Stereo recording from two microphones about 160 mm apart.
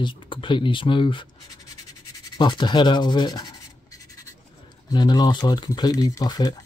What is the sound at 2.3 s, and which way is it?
Speech, 30° left (ahead or behind).